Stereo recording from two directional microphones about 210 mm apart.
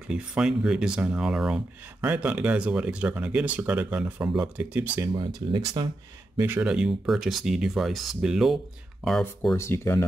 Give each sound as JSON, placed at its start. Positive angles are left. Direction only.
{"t": 0.1, "sound": "speech", "side_deg": -5}
{"t": 5.1, "sound": "speech", "side_deg": -20}
{"t": 6.3, "sound": "speech", "side_deg": -10}